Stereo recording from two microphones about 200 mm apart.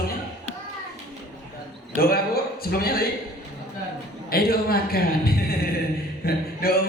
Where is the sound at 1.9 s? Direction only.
50° left (ahead or behind).